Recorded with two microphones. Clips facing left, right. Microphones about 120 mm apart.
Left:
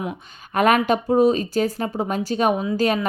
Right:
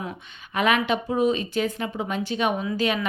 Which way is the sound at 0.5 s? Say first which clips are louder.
Left 5 dB; 45° left (ahead or behind).